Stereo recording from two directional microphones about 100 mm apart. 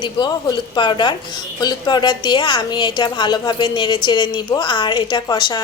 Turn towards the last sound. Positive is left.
turn(degrees=40)  # may be behind; listen again after turning